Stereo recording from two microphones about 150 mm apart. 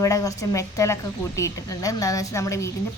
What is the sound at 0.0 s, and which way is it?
Speech, 20° left (ahead or behind).